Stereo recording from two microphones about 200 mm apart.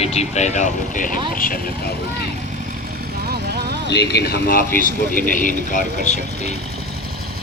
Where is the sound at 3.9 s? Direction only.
55° left (ahead or behind); by 6.6 s 35° left (ahead or behind).